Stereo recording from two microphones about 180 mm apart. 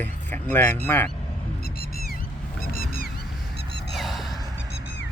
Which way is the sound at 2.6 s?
55° left (ahead or behind).